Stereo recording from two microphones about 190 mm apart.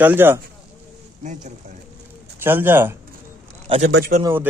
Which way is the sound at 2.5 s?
10° right (ahead or behind).